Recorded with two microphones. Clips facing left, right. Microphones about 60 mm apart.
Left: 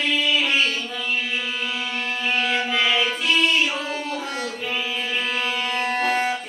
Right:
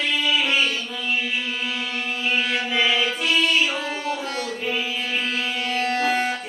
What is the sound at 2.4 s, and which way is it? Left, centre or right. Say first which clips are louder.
Music: left 1 dB; centre.